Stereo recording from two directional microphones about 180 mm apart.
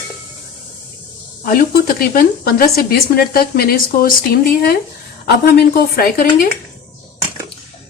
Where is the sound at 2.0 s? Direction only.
55° left (ahead or behind).